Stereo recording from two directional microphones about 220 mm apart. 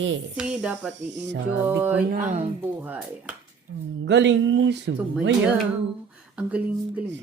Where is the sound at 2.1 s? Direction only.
35° right (ahead or behind).